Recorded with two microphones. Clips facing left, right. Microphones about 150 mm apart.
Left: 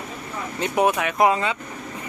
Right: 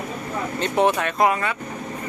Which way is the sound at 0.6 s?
10° left (ahead or behind).